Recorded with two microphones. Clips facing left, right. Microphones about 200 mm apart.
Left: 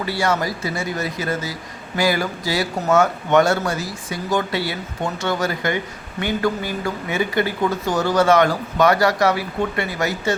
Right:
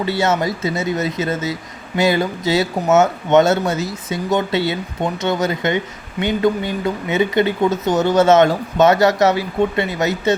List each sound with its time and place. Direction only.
0.0 s speech: 25° right (ahead or behind)